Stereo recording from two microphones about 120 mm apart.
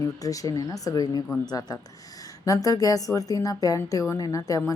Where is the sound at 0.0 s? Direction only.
30° left (ahead or behind).